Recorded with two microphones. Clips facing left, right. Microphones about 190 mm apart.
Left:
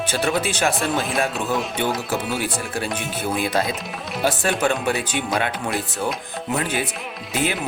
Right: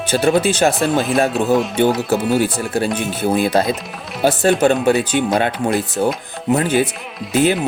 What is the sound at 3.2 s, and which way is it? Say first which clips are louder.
Speech: right 7 dB; 35° right (ahead or behind).